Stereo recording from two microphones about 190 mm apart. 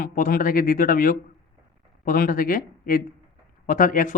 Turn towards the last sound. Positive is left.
turn(degrees=45)  # may be behind; listen again after turning